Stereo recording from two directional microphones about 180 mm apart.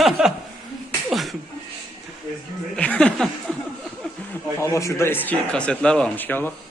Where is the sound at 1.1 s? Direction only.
Centre (ahead or behind).